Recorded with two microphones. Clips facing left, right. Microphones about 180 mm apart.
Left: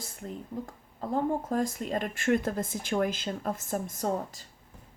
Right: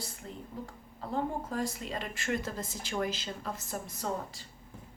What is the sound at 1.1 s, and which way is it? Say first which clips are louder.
Speech: left 5 dB; 45° left (ahead or behind).